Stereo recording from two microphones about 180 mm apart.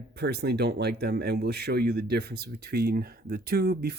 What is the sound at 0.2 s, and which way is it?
Speech, 65° right (ahead or behind).